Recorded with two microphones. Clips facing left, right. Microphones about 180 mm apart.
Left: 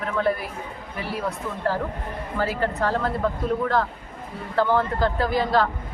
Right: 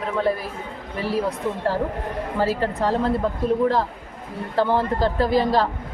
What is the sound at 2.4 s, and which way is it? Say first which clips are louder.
Speech: right 2 dB; 30° right (ahead or behind).